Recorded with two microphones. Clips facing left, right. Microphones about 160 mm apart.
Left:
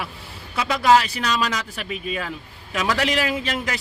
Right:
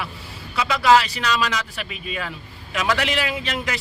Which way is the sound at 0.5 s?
40° left (ahead or behind).